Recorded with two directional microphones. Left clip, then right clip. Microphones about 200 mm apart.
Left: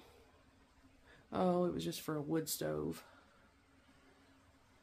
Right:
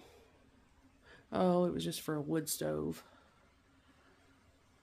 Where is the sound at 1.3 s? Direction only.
35° right (ahead or behind).